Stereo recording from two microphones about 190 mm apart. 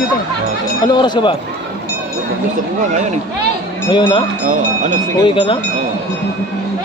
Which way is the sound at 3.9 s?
25° left (ahead or behind).